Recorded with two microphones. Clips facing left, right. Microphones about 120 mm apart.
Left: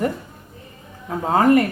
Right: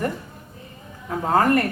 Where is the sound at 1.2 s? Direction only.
15° left (ahead or behind).